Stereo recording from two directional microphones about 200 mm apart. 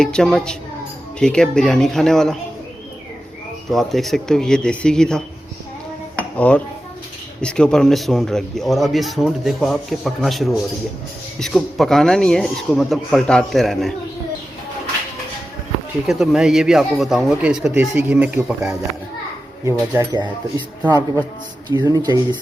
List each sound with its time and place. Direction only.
0.0 s speech: 5° left (ahead or behind)
3.7 s speech: centre (ahead or behind)
6.3 s dishes: 5° left (ahead or behind)
7.4 s speech: 5° left (ahead or behind)
16.0 s speech: centre (ahead or behind); by 20.7 s 20° right (ahead or behind)
21.7 s speech: 20° right (ahead or behind)